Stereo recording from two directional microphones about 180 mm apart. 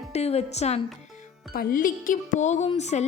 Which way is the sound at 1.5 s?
50° left (ahead or behind).